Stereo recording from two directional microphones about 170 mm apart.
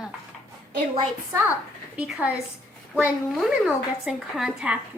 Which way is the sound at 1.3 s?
15° right (ahead or behind).